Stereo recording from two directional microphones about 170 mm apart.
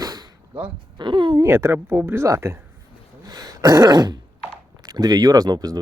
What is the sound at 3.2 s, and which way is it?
Throat clearing, 20° right (ahead or behind).